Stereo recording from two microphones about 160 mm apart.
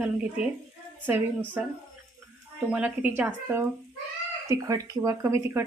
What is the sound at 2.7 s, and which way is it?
Speech, 10° right (ahead or behind).